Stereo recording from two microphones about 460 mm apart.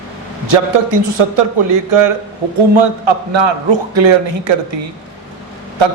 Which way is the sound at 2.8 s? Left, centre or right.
Right.